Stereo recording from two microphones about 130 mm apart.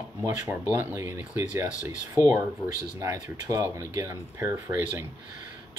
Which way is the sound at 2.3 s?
30° right (ahead or behind).